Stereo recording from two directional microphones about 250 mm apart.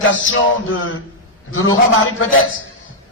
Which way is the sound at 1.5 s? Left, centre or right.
Left.